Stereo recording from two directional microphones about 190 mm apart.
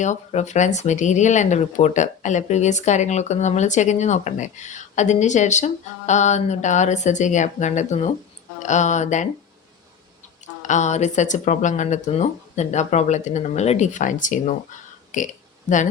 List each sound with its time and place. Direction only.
0.0 s speech: 40° left (ahead or behind)
10.4 s speech: 40° left (ahead or behind)